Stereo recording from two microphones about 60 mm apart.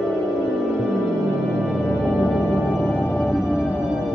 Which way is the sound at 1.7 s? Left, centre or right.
Centre.